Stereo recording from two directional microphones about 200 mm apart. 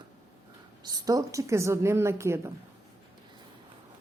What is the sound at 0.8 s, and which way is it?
A woman's voice, 20° right (ahead or behind).